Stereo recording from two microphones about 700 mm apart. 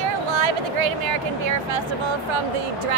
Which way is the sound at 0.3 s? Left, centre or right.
Right.